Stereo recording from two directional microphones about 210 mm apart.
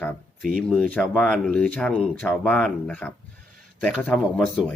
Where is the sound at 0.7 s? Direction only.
5° left (ahead or behind).